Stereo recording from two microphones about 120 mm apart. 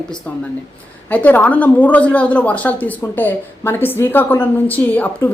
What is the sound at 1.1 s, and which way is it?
A woman's voice, 15° left (ahead or behind).